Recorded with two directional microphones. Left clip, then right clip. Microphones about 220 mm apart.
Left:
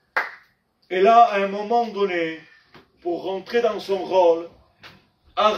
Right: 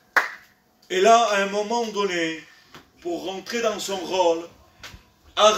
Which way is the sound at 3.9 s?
15° right (ahead or behind).